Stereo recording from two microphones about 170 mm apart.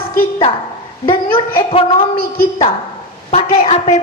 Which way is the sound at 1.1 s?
30° left (ahead or behind).